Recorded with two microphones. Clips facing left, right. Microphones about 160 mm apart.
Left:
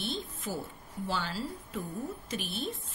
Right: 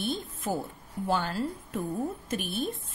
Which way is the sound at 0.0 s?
50° right (ahead or behind).